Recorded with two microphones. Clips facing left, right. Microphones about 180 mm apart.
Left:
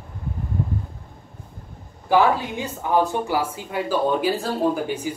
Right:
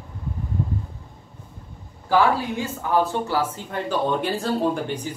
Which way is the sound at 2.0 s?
20° left (ahead or behind).